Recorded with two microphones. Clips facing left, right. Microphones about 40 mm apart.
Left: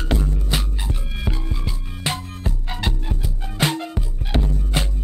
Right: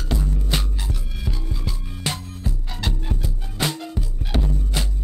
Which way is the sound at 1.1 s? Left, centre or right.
Left.